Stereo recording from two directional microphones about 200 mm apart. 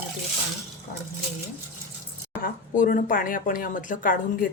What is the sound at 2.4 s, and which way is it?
Speech, 45° left (ahead or behind).